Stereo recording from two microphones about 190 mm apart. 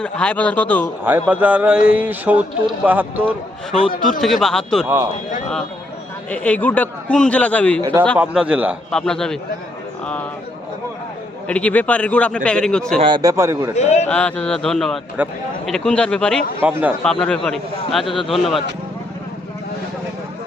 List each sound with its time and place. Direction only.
0.0 s a man's voice: 5° left (ahead or behind)
1.0 s speech: 10° right (ahead or behind)
4.2 s a man's voice: centre (ahead or behind)
6.3 s a man's voice: 10° left (ahead or behind)
8.2 s a man's voice: 5° right (ahead or behind)
11.4 s a man's voice: 5° left (ahead or behind)
13.0 s a man's voice: 25° right (ahead or behind)
13.7 s a man's voice: 35° left (ahead or behind)
14.1 s a man's voice: 5° left (ahead or behind)
16.6 s speech: 10° right (ahead or behind)
17.0 s a man's voice: 5° left (ahead or behind)